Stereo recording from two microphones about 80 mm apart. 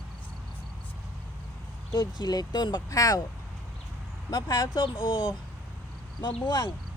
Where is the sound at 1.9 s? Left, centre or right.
Left.